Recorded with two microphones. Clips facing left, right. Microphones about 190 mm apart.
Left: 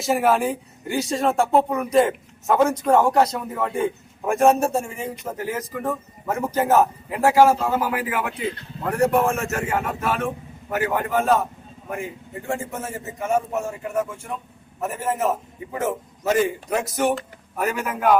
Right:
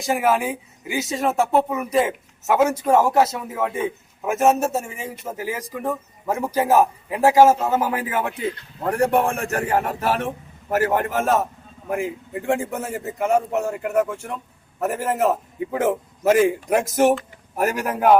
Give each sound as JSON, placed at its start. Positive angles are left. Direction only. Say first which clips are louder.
{"t": 0.0, "sound": "a man's voice", "louder": "left 1 dB", "side_deg": 0}
{"t": 13.1, "sound": "a man's voice", "louder": "right 3 dB", "side_deg": -70}
{"t": 16.8, "sound": "speech", "louder": "right 5 dB", "side_deg": -90}
{"t": 17.6, "sound": "a man's voice", "louder": "right 3 dB", "side_deg": -40}